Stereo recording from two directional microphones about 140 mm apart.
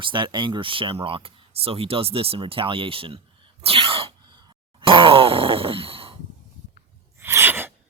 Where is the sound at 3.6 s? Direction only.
40° right (ahead or behind).